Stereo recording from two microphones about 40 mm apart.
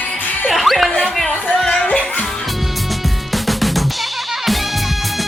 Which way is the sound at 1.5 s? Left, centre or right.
Centre.